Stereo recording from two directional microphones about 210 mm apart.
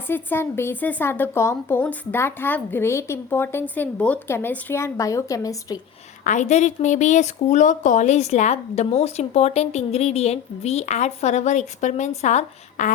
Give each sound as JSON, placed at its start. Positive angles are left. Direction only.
{"t": 0.1, "sound": "a woman's voice", "side_deg": 10}
{"t": 6.2, "sound": "speech", "side_deg": 35}